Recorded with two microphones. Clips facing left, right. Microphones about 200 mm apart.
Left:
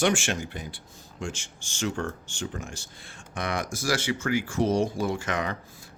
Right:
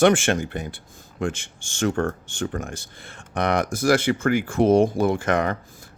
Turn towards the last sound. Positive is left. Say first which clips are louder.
# right 7 dB
turn(degrees=-55)  # may be behind; listen again after turning